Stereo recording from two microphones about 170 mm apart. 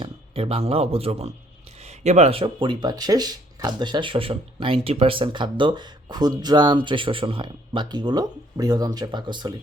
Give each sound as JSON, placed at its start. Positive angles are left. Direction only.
{"t": 0.0, "sound": "speech", "side_deg": -35}